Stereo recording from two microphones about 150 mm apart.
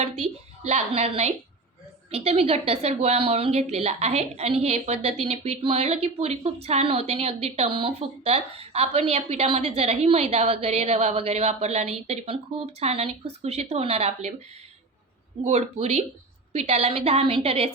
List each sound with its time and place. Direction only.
0.7 s speech: 45° right (ahead or behind)
15.4 s a woman's voice: 45° right (ahead or behind)